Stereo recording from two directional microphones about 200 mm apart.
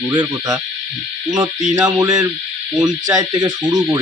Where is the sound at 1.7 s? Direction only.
15° right (ahead or behind).